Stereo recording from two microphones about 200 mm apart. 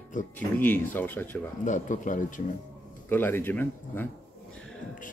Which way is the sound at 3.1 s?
10° left (ahead or behind).